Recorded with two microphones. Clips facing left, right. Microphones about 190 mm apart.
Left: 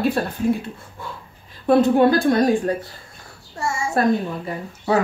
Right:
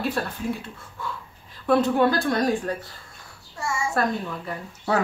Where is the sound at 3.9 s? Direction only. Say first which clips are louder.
Left 8 dB; 25° left (ahead or behind).